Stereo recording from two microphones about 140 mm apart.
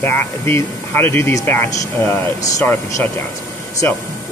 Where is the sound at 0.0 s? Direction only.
15° left (ahead or behind).